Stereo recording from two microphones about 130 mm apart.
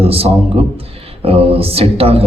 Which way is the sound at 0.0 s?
50° right (ahead or behind).